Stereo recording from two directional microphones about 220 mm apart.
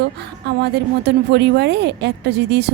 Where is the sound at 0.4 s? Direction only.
50° right (ahead or behind).